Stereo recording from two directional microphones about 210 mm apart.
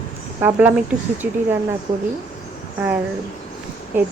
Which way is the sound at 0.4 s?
10° right (ahead or behind).